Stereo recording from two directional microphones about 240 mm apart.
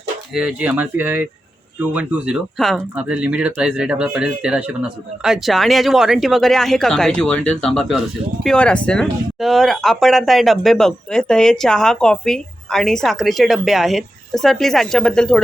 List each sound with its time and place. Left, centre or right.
0.3 s speech: centre